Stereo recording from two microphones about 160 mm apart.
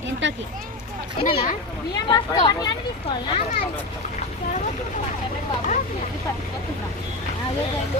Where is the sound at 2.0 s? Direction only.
30° left (ahead or behind).